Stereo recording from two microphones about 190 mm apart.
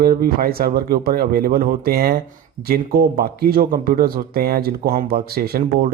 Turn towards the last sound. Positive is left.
turn(degrees=-55)  # may be behind; listen again after turning